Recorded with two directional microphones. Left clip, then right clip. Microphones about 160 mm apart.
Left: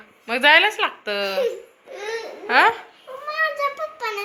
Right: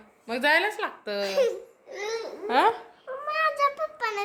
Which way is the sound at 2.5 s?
35° right (ahead or behind).